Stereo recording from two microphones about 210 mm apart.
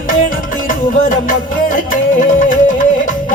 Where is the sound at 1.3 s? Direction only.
40° left (ahead or behind).